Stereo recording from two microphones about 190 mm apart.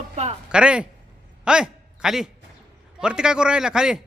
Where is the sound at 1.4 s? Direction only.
5° right (ahead or behind).